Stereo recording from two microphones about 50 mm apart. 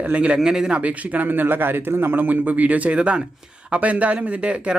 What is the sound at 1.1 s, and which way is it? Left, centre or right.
Speech, right.